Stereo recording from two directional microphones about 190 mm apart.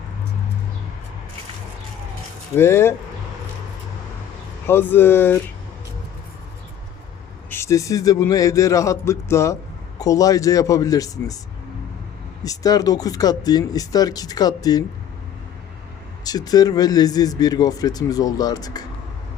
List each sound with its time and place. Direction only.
2.6 s speech: 15° left (ahead or behind)
4.6 s speech: 10° left (ahead or behind)
7.5 s speech: 15° left (ahead or behind)
12.4 s speech: 20° left (ahead or behind)
16.2 s speech: 20° left (ahead or behind)